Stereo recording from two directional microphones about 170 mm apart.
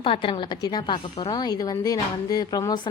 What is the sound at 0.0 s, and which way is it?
A woman's voice, 30° left (ahead or behind).